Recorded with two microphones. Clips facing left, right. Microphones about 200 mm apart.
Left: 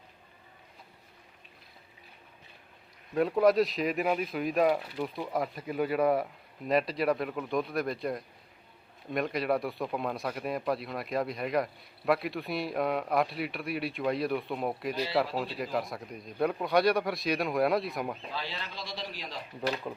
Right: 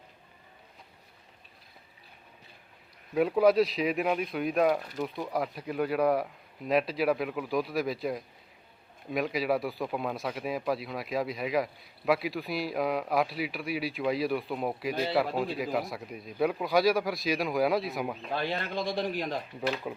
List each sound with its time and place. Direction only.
3.2 s a man's voice: centre (ahead or behind)
18.3 s a man's voice: 55° right (ahead or behind)
19.9 s a man's voice: 5° right (ahead or behind)